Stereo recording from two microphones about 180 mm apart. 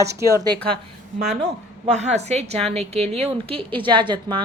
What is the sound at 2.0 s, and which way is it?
A woman's voice, 40° right (ahead or behind).